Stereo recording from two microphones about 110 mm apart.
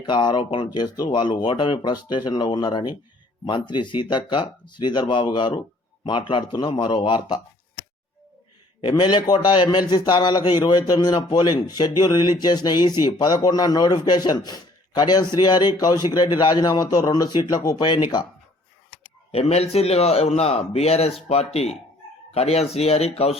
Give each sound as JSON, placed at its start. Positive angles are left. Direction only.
{"t": 0.0, "sound": "speech", "side_deg": 45}
{"t": 8.8, "sound": "speech", "side_deg": 45}
{"t": 19.3, "sound": "speech", "side_deg": 70}